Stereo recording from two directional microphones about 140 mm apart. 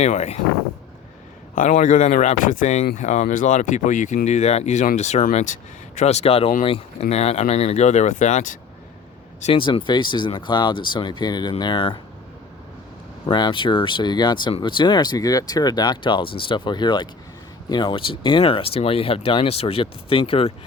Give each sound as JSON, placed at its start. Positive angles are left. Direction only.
{"t": 0.0, "sound": "speech", "side_deg": 55}
{"t": 1.5, "sound": "speech", "side_deg": 70}
{"t": 9.4, "sound": "speech", "side_deg": 40}
{"t": 13.2, "sound": "speech", "side_deg": 35}